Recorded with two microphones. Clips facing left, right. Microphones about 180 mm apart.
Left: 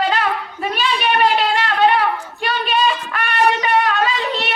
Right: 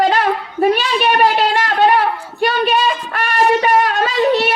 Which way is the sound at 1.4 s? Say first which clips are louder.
Right 2 dB; 45° right (ahead or behind).